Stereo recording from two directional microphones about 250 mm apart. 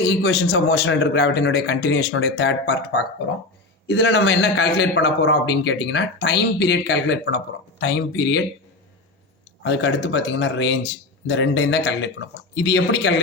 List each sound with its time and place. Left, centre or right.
0.0 s a man's voice: left
9.6 s a man's voice: left